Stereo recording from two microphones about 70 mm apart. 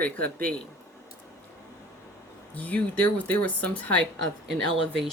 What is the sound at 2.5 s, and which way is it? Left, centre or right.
Speech, left.